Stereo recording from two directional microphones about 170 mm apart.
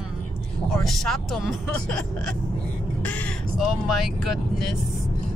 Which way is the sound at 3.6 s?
Centre (ahead or behind).